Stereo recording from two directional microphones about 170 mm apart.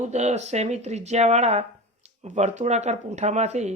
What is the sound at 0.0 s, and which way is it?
Speech, 40° right (ahead or behind).